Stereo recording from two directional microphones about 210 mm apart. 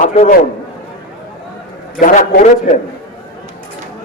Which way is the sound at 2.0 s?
40° left (ahead or behind).